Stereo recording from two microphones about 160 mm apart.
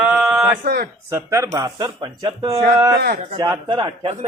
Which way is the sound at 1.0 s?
15° right (ahead or behind).